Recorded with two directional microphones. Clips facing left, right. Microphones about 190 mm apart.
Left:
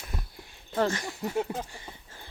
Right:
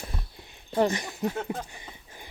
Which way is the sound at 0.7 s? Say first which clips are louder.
Right 3 dB; 15° right (ahead or behind).